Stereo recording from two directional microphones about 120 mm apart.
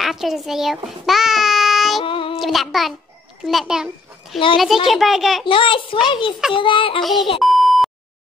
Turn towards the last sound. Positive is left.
turn(degrees=0)  # may be behind; listen again after turning